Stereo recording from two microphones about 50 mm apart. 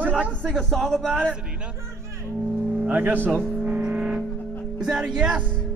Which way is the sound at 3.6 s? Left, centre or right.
Right.